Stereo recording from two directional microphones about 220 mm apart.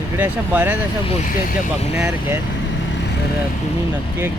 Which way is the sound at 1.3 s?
40° left (ahead or behind).